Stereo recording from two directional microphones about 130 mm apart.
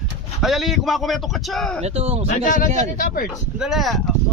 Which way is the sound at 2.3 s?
90° left.